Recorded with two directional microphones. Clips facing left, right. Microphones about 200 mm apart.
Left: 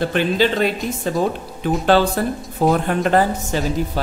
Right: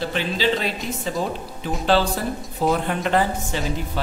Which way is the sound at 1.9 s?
55° left (ahead or behind).